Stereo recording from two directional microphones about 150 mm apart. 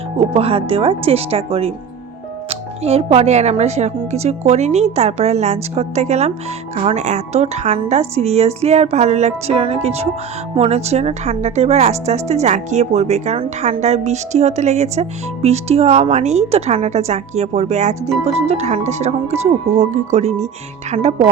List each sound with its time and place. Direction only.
0.2 s speech: 40° right (ahead or behind)